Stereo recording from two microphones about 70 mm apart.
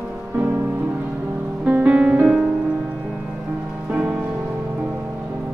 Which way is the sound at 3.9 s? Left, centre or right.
Right.